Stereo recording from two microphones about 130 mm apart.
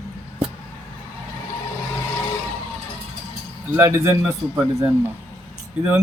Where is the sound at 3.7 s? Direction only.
20° right (ahead or behind).